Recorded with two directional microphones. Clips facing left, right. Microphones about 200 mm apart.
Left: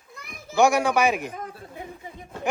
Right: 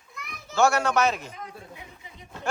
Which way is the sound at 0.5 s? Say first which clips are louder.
Left 2 dB; 15° left (ahead or behind).